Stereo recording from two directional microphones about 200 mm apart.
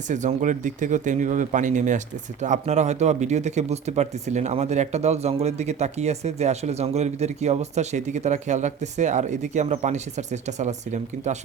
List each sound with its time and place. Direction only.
0.1 s speech: 35° right (ahead or behind)